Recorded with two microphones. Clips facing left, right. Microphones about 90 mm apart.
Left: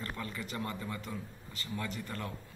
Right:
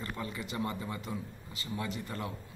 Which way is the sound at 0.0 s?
15° right (ahead or behind).